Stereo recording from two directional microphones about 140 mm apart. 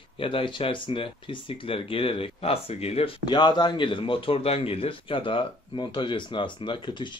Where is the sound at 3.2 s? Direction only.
30° left (ahead or behind).